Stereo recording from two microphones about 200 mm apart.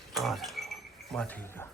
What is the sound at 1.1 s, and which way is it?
Speech, 5° left (ahead or behind).